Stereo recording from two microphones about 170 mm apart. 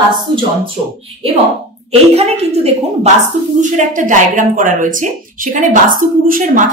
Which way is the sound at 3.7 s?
50° right (ahead or behind).